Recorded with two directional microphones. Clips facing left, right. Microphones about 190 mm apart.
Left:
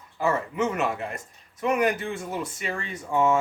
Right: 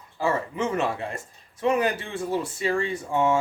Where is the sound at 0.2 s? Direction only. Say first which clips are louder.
Even; 30° right (ahead or behind).